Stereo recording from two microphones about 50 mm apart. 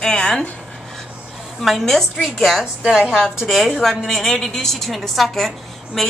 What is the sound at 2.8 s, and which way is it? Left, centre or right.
Speech, centre.